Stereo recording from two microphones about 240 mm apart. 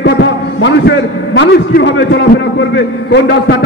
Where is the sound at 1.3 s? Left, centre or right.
Left.